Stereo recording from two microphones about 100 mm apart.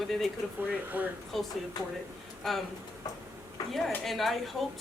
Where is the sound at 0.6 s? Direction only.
20° right (ahead or behind).